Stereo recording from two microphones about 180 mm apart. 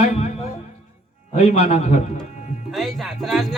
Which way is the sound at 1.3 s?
35° left (ahead or behind).